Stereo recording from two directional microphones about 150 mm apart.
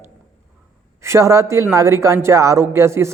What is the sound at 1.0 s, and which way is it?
Speech, 20° right (ahead or behind).